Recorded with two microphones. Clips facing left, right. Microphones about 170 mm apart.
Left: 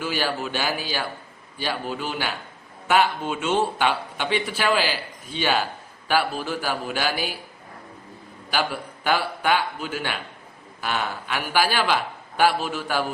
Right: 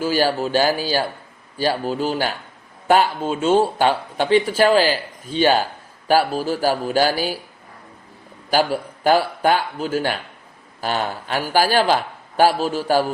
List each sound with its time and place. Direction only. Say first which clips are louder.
0.0 s speech: right 7 dB; 40° right (ahead or behind)
8.4 s speech: right 7 dB; 40° right (ahead or behind)